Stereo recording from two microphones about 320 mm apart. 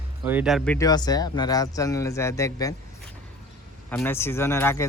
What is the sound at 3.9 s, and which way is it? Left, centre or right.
Speech, centre.